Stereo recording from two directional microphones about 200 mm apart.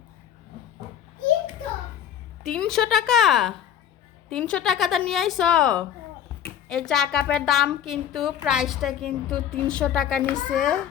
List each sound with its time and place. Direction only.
2.4 s a woman's voice: centre (ahead or behind)